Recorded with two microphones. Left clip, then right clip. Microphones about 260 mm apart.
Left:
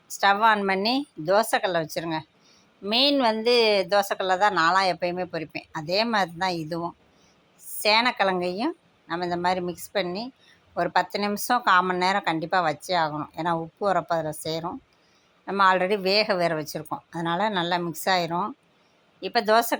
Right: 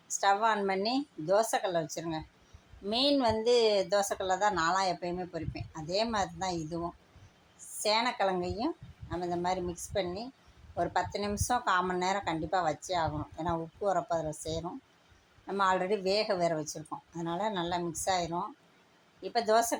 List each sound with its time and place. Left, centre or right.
0.2 s speech: left